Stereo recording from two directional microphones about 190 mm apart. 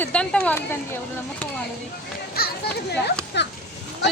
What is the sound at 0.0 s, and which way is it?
Speech, 5° left (ahead or behind).